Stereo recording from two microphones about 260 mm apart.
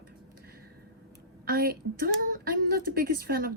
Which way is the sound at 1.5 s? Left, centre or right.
Right.